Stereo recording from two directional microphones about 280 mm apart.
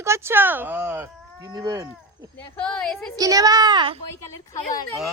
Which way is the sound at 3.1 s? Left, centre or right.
Centre.